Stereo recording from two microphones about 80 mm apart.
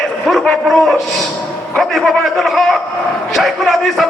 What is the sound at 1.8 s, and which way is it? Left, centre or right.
A man's voice, centre.